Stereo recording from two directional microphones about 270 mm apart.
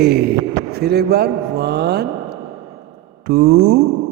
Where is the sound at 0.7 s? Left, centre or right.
Right.